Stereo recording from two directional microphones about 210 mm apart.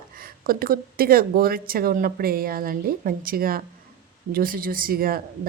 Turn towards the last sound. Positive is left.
turn(degrees=-45)  # may be behind; listen again after turning